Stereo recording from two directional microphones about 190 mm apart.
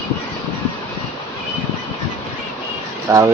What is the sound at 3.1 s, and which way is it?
Speech, 10° right (ahead or behind).